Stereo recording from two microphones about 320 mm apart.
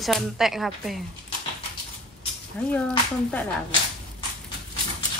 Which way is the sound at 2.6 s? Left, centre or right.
Centre.